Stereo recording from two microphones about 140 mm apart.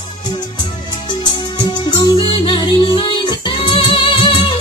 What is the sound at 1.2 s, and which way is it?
Music, 35° left (ahead or behind).